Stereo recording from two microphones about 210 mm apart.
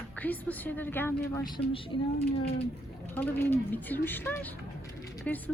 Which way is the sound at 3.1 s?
10° left (ahead or behind).